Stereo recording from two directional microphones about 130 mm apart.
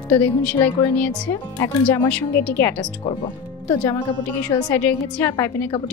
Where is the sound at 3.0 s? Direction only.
45° left (ahead or behind).